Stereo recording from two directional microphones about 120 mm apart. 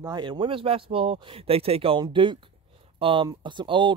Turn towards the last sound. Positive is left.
turn(degrees=-45)  # may be behind; listen again after turning